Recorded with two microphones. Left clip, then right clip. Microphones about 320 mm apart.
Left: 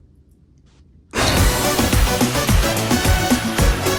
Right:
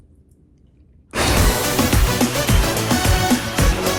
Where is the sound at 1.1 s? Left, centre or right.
Centre.